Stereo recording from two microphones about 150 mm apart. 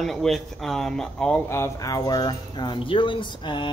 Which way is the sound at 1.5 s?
20° left (ahead or behind).